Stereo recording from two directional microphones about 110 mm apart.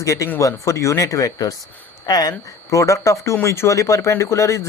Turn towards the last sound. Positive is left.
turn(degrees=25)  # may be behind; listen again after turning